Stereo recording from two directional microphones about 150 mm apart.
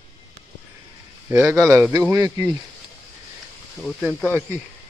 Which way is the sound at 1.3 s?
10° right (ahead or behind).